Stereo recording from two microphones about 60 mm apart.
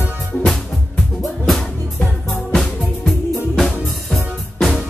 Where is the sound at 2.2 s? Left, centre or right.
Centre.